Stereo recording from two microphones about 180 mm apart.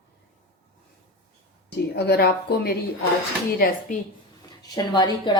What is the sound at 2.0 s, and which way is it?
Speech, 65° left (ahead or behind).